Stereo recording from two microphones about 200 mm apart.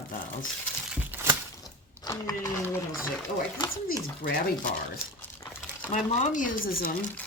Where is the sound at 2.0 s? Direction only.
20° left (ahead or behind).